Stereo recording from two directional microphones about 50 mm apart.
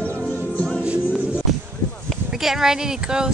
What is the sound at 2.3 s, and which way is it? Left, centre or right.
Speech, centre.